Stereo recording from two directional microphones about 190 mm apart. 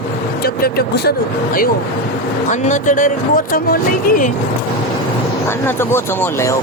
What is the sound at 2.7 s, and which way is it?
Speech, 40° left (ahead or behind).